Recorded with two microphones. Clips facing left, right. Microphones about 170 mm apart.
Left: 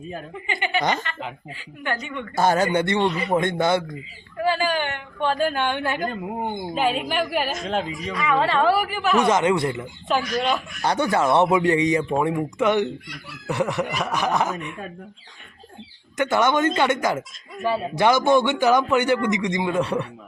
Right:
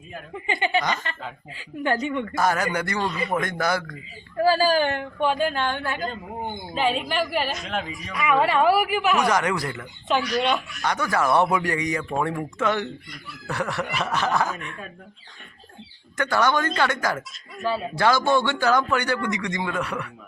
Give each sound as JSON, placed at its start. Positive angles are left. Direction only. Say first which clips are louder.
{"t": 0.5, "sound": "a woman's voice", "louder": "right 2 dB", "side_deg": -25}
{"t": 0.8, "sound": "a woman's voice", "louder": "left 2 dB", "side_deg": 25}
{"t": 1.8, "sound": "speech", "louder": "right 5 dB", "side_deg": -35}
{"t": 2.3, "sound": "a woman's voice", "louder": "left 7 dB", "side_deg": 30}
{"t": 4.4, "sound": "speech", "louder": "right 3 dB", "side_deg": -35}
{"t": 5.2, "sound": "speech", "louder": "left 1 dB", "side_deg": 0}
{"t": 5.6, "sound": "speech", "louder": "left 3 dB", "side_deg": 15}
{"t": 6.7, "sound": "speech", "louder": "even", "side_deg": 5}
{"t": 7.6, "sound": "a woman's voice", "louder": "left 5 dB", "side_deg": 30}
{"t": 8.2, "sound": "speech", "louder": "right 1 dB", "side_deg": -15}
{"t": 9.1, "sound": "a woman's voice", "louder": "left 8 dB", "side_deg": 25}
{"t": 10.8, "sound": "a woman's voice", "louder": "left 3 dB", "side_deg": 30}
{"t": 16.1, "sound": "a woman's voice", "louder": "left 2 dB", "side_deg": 20}